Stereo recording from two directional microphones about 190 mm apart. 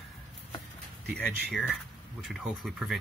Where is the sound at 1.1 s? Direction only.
5° left (ahead or behind).